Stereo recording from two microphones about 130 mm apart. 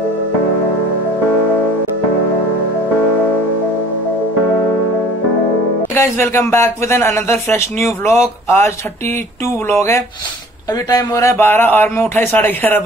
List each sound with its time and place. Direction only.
5.9 s speech: 20° left (ahead or behind)